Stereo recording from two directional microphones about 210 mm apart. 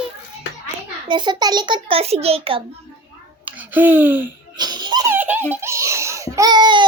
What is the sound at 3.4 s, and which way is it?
Speech, 10° right (ahead or behind).